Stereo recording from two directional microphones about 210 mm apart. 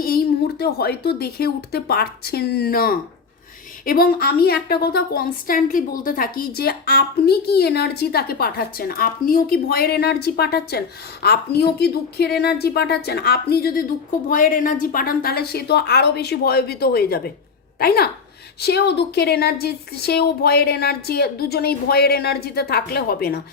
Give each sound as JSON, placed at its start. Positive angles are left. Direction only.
{"t": 0.0, "sound": "a woman's voice", "side_deg": 50}